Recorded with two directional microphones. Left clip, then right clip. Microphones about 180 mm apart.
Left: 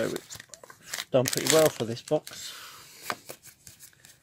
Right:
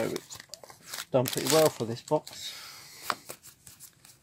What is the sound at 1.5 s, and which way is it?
Speech, 10° left (ahead or behind).